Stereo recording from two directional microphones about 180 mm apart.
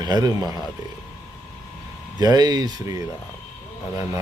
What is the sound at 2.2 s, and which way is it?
Speech, 20° right (ahead or behind).